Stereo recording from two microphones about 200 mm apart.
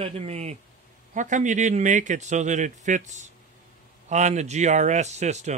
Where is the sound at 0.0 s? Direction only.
30° right (ahead or behind).